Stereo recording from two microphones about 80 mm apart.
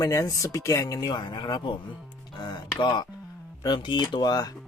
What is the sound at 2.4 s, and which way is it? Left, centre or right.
Music, left.